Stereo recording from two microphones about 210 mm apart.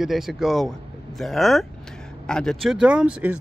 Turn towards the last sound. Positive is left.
turn(degrees=-5)  # may be behind; listen again after turning